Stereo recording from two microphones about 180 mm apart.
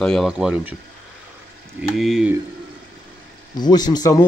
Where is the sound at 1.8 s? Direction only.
Centre (ahead or behind).